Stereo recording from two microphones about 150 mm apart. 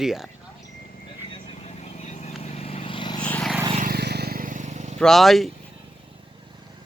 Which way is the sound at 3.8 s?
85° right.